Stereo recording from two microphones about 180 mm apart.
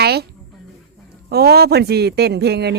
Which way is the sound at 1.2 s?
60° right (ahead or behind).